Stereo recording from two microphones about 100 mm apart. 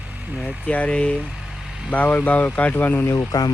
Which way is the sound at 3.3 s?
40° left (ahead or behind).